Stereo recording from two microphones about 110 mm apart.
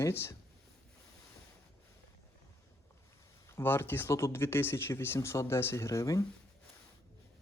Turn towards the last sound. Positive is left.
turn(degrees=30)  # may be behind; listen again after turning